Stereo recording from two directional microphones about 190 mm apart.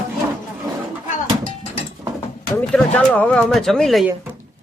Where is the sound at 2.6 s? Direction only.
10° left (ahead or behind).